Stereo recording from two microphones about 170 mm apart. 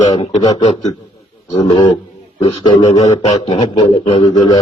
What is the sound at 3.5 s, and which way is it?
A man's voice, 35° left (ahead or behind).